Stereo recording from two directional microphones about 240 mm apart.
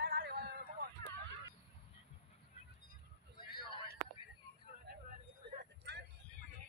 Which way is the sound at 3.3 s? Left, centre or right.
Centre.